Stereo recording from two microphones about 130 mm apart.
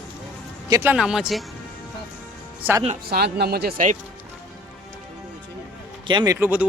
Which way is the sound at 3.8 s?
90° right.